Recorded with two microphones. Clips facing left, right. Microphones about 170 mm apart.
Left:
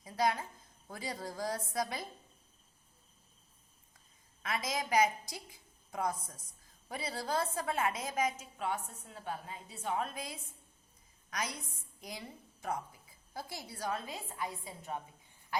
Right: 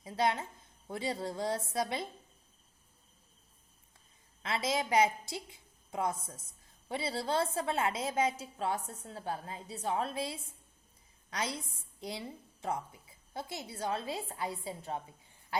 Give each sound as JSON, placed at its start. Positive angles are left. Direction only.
{"t": 0.0, "sound": "a sound", "side_deg": -25}
{"t": 0.9, "sound": "a woman's voice", "side_deg": -25}
{"t": 4.4, "sound": "a woman's voice", "side_deg": -30}